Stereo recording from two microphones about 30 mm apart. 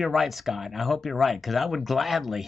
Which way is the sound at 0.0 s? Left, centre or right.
Centre.